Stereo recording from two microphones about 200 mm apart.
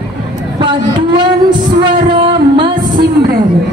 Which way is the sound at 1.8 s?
25° right (ahead or behind).